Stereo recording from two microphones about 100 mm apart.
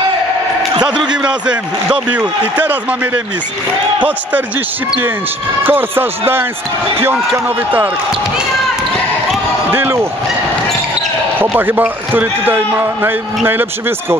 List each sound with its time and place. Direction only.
1.1 s speech: 10° right (ahead or behind)
5.6 s a man's voice: 20° right (ahead or behind)
9.7 s a man's voice: 20° right (ahead or behind)
11.5 s a man's voice: 20° right (ahead or behind)